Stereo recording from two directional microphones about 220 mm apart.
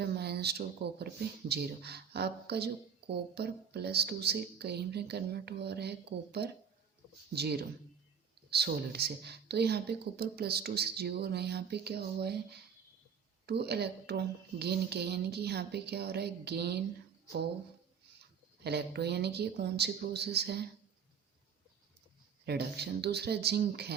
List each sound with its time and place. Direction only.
0.0 s speech: 45° right (ahead or behind)
13.4 s speech: 50° right (ahead or behind)
18.6 s speech: 50° right (ahead or behind)
22.4 s speech: 50° right (ahead or behind)